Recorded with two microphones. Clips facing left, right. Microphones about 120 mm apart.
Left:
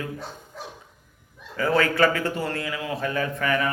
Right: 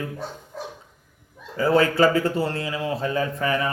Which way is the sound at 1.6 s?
30° right (ahead or behind).